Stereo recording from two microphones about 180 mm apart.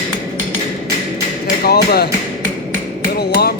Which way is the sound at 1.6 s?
60° left (ahead or behind).